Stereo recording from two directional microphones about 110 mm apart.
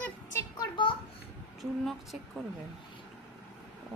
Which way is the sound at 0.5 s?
40° left (ahead or behind).